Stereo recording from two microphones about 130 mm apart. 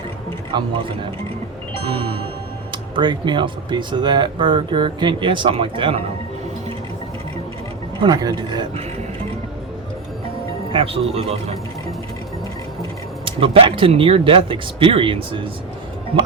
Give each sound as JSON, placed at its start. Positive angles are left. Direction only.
{"t": 0.5, "sound": "speech", "side_deg": -35}
{"t": 1.8, "sound": "speech", "side_deg": -45}
{"t": 8.0, "sound": "speech", "side_deg": -30}
{"t": 10.7, "sound": "a man's voice", "side_deg": -45}
{"t": 13.2, "sound": "speech", "side_deg": -45}